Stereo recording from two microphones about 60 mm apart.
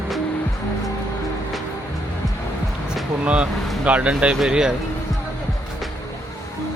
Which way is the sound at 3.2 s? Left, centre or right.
Centre.